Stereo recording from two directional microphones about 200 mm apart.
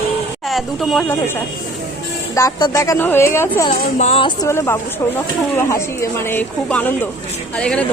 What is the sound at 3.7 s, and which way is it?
Speech, 35° left (ahead or behind).